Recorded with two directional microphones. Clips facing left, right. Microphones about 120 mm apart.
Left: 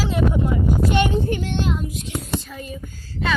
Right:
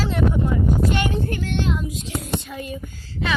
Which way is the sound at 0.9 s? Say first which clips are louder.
Left 3 dB; 20° left (ahead or behind).